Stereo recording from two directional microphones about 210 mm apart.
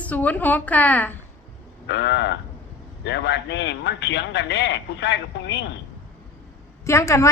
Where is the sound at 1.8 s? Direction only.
55° left (ahead or behind).